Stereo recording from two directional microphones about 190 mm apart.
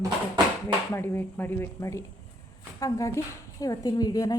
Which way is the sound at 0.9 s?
10° left (ahead or behind).